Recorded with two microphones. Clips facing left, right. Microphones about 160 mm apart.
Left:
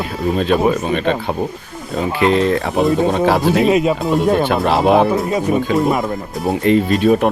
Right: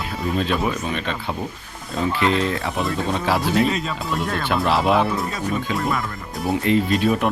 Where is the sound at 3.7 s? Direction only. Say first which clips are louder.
Left 11 dB; 15° left (ahead or behind).